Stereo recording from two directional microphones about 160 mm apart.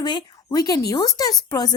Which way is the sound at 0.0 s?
30° left (ahead or behind).